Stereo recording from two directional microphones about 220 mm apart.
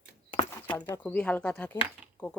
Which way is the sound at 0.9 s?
10° left (ahead or behind).